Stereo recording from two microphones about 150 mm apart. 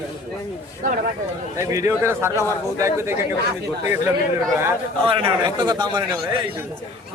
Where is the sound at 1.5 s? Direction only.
20° right (ahead or behind).